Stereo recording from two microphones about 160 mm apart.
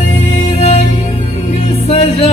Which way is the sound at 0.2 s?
45° left (ahead or behind).